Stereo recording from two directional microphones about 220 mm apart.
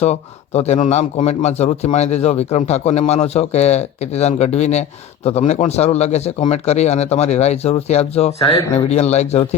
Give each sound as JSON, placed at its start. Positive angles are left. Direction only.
{"t": 0.0, "sound": "a man's voice", "side_deg": 30}